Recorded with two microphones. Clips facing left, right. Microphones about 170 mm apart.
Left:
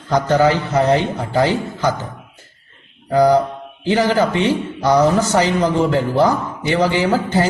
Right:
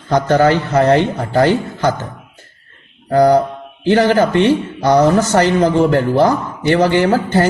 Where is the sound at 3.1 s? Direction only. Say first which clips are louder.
Right 2 dB; 60° right (ahead or behind).